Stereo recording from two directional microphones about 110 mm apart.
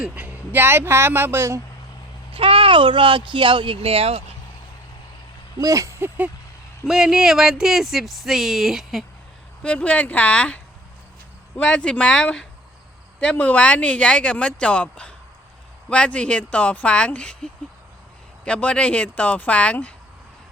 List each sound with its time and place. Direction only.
0.0 s speech: 15° right (ahead or behind)
2.3 s speech: 55° right (ahead or behind)
5.5 s a sound: 30° right (ahead or behind)
6.8 s speech: 5° right (ahead or behind)
9.6 s speech: 10° left (ahead or behind)